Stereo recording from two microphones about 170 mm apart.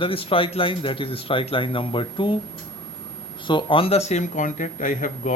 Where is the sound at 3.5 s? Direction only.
30° left (ahead or behind); by 5.4 s 50° left (ahead or behind).